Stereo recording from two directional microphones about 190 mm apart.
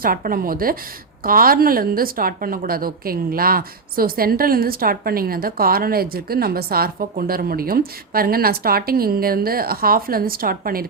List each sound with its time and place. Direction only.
0.0 s a woman's voice: 50° right (ahead or behind)